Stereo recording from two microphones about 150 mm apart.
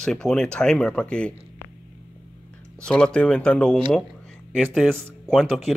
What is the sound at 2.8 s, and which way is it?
Speech, 5° left (ahead or behind).